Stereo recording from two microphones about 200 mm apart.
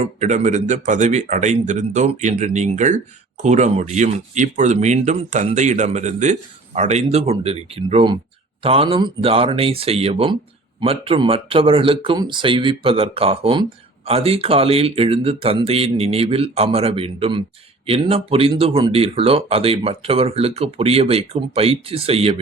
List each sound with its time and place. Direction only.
0.0 s speech: 35° right (ahead or behind)